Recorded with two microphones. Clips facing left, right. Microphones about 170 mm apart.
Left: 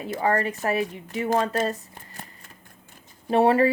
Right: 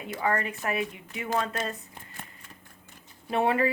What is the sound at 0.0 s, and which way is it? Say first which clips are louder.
Speech: left 5 dB; 35° left (ahead or behind).